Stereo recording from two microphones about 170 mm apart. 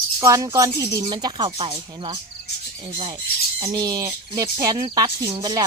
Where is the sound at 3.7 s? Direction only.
20° right (ahead or behind).